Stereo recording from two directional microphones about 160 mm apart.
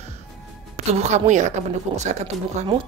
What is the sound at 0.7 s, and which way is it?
Speech, 45° right (ahead or behind).